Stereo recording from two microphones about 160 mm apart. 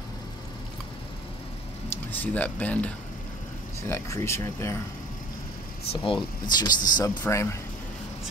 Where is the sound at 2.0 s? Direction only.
10° left (ahead or behind).